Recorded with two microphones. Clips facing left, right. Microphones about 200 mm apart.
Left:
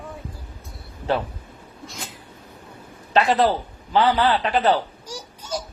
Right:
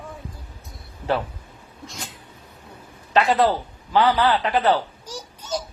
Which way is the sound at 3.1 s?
20° left (ahead or behind).